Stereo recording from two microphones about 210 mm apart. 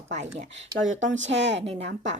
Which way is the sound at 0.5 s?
65° right (ahead or behind).